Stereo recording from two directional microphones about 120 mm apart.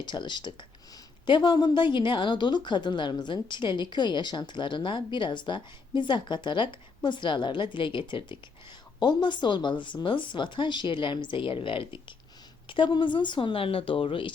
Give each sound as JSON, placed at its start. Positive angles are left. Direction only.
{"t": 0.0, "sound": "a woman's voice", "side_deg": 40}